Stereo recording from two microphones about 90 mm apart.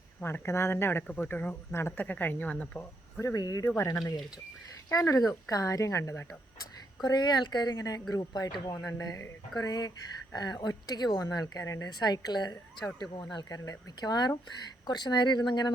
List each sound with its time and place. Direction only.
0.2 s speech: 25° left (ahead or behind)
3.2 s speech: 40° left (ahead or behind)
4.9 s a woman's voice: 35° left (ahead or behind)
7.0 s speech: 50° left (ahead or behind)
8.9 s a woman's voice: 35° left (ahead or behind)
9.6 s a woman's voice: 50° left (ahead or behind)
11.9 s speech: 50° left (ahead or behind)